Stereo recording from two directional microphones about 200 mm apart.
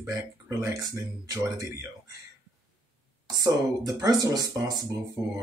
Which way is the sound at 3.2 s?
20° right (ahead or behind).